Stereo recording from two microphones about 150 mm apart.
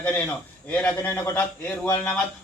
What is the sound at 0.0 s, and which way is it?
A man's voice, 10° left (ahead or behind).